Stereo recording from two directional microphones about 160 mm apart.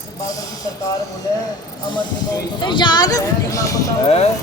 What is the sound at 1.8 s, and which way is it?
Speech, 30° left (ahead or behind).